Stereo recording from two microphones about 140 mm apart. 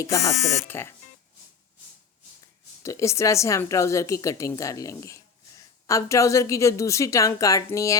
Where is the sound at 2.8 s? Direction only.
20° left (ahead or behind).